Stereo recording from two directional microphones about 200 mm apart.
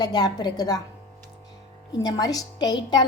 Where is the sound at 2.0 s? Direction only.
20° left (ahead or behind).